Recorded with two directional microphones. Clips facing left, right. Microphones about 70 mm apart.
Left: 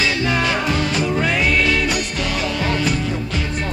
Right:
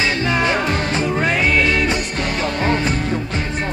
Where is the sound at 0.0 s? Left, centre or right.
Right.